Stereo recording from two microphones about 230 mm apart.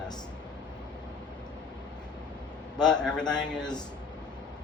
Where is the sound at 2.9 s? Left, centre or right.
Centre.